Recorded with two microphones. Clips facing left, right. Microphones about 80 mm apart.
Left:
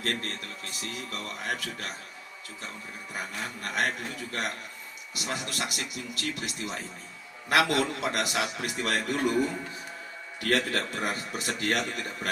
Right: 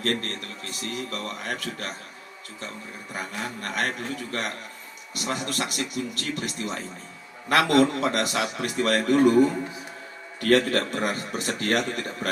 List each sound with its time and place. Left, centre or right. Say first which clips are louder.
0.0 s a man's voice: right 5 dB; right
3.2 s a man's voice: right 4 dB; right
10.4 s a man's voice: right 7 dB; right